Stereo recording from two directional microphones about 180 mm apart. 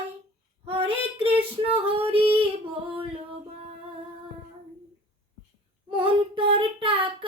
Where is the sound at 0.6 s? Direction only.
30° right (ahead or behind).